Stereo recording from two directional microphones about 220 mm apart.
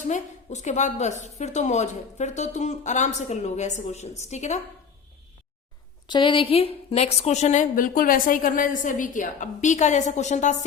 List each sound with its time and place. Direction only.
0.1 s a woman's voice: 35° left (ahead or behind)
6.1 s a woman's voice: 20° left (ahead or behind)